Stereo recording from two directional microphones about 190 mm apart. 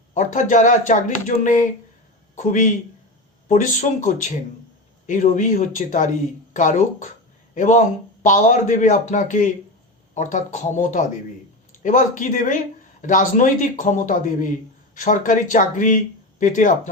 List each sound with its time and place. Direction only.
0.1 s a man's voice: 40° left (ahead or behind)